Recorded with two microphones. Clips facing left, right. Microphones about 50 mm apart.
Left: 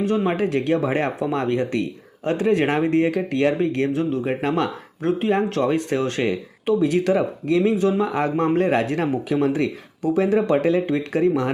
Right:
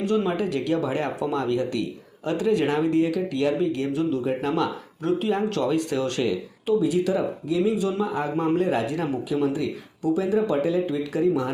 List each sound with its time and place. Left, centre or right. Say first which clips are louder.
0.3 s speech: left 4 dB; left